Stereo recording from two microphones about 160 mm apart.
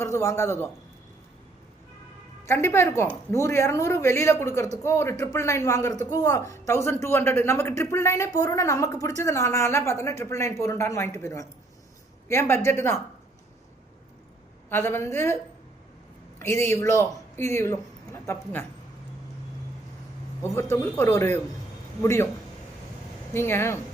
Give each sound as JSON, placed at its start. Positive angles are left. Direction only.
{"t": 0.0, "sound": "a man's voice", "side_deg": 20}
{"t": 2.5, "sound": "a man's voice", "side_deg": 15}
{"t": 14.7, "sound": "a man's voice", "side_deg": 15}
{"t": 16.4, "sound": "a man's voice", "side_deg": 15}
{"t": 20.4, "sound": "a man's voice", "side_deg": 15}
{"t": 23.3, "sound": "a man's voice", "side_deg": 15}